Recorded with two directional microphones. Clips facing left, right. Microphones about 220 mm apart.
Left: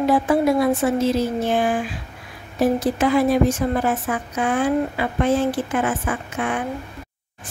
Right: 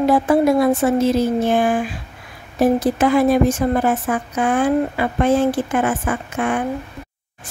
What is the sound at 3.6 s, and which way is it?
A woman's voice, 50° right (ahead or behind).